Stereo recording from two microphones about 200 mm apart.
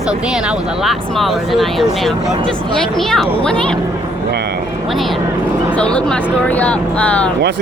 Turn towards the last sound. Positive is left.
turn(degrees=5)  # may be behind; listen again after turning